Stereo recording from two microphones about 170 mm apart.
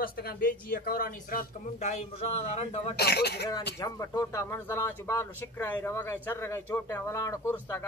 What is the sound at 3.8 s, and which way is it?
Speech, 20° left (ahead or behind).